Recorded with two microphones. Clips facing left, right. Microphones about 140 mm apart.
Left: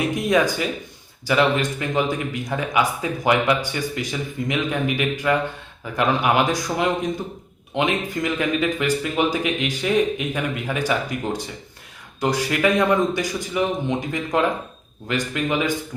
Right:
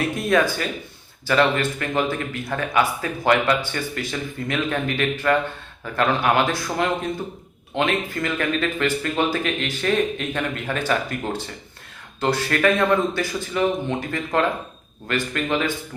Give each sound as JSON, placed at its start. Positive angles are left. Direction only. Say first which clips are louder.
{"t": 0.0, "sound": "speech", "louder": "left 1 dB", "side_deg": 15}